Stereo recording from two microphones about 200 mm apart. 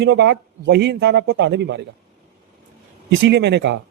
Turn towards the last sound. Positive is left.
turn(degrees=-60)  # may be behind; listen again after turning